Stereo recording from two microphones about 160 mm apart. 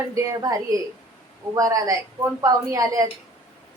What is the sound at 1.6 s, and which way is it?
A woman's voice, 20° right (ahead or behind).